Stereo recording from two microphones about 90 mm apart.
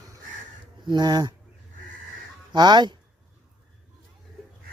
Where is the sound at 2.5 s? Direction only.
55° right (ahead or behind).